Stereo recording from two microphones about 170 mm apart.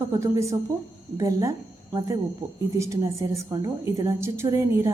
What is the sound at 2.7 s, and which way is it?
A woman's voice, 20° right (ahead or behind).